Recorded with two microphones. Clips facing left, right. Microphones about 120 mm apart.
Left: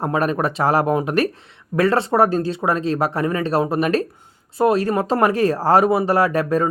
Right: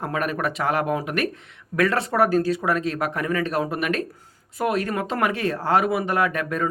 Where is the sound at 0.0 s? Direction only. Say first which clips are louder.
Left 5 dB; 30° left (ahead or behind).